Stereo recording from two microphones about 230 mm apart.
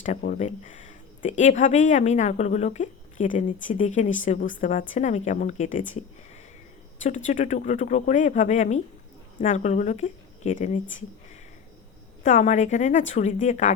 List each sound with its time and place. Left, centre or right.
0.0 s speech: left
7.0 s speech: left
12.2 s speech: left